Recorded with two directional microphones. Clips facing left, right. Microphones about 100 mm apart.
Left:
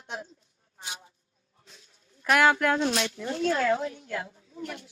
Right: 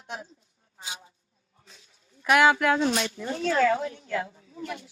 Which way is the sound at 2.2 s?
10° right (ahead or behind).